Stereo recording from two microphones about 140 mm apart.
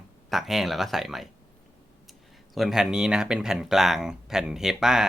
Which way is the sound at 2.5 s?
5° right (ahead or behind).